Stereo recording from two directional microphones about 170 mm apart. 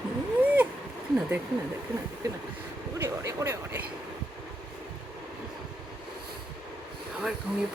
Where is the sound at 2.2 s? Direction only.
20° right (ahead or behind).